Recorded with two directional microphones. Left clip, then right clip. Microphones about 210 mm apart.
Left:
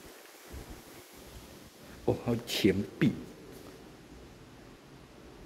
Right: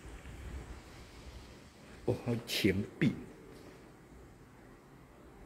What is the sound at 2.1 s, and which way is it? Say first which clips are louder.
Speech: left 4 dB; 10° left (ahead or behind).